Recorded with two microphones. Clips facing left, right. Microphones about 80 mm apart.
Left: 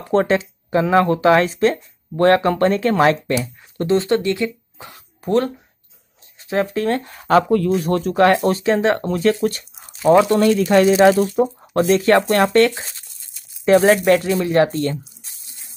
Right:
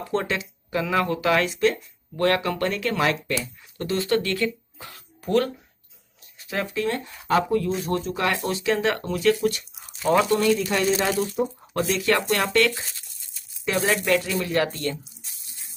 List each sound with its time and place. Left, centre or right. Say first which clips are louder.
0.1 s speech: left 10 dB; left
7.2 s speech: left 7 dB; left
8.3 s speech: left 8 dB; left
10.2 s speech: left 6 dB; left
12.6 s speech: left 6 dB; left